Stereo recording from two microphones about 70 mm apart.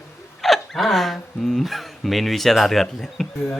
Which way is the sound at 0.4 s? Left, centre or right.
Centre.